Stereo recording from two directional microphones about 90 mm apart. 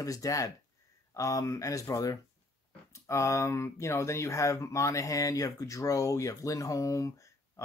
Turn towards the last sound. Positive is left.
turn(degrees=40)  # may be behind; listen again after turning